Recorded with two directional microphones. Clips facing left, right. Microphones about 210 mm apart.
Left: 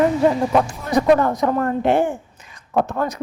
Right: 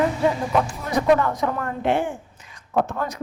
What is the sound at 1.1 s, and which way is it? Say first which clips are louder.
Speech: left 4 dB; 40° left (ahead or behind).